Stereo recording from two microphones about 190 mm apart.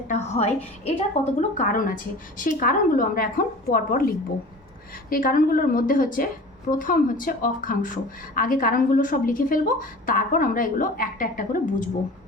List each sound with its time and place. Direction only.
0.1 s a woman's voice: 35° left (ahead or behind)